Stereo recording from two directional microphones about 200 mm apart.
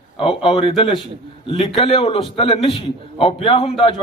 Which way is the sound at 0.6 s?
25° left (ahead or behind).